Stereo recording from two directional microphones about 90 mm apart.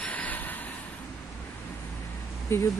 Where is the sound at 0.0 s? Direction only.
15° left (ahead or behind).